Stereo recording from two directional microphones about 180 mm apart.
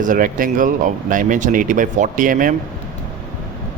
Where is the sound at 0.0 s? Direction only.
50° right (ahead or behind).